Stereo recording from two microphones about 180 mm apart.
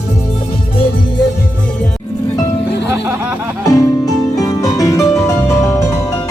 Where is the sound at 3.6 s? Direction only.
20° left (ahead or behind).